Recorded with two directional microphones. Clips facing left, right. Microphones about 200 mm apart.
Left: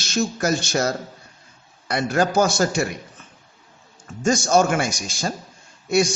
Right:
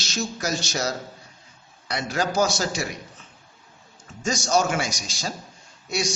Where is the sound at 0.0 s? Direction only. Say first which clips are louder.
Left 6 dB; 55° left (ahead or behind).